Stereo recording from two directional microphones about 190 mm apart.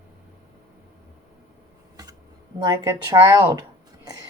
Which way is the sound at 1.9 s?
20° right (ahead or behind).